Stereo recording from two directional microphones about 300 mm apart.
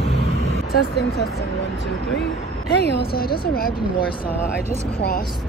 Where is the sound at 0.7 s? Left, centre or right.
Left.